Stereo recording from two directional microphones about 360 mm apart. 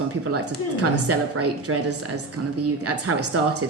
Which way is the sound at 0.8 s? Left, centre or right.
Right.